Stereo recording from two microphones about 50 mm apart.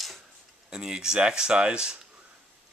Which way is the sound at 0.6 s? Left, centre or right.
Centre.